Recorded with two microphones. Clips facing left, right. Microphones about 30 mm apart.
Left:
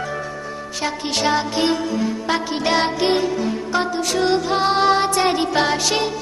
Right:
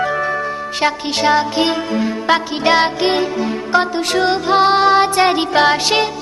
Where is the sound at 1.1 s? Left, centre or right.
Centre.